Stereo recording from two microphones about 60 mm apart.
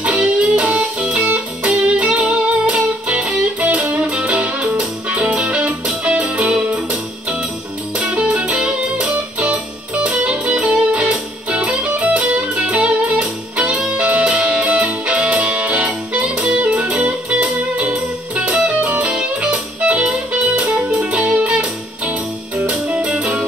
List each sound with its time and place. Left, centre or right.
0.0 s music: right
20.9 s music: centre
21.3 s music: right